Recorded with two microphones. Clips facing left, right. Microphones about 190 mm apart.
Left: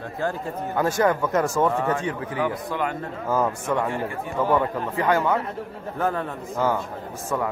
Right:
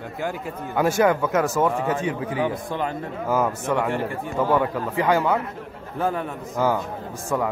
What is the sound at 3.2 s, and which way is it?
Speech, 5° right (ahead or behind).